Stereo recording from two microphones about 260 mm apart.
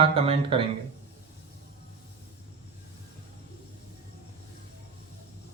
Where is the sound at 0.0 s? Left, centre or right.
Right.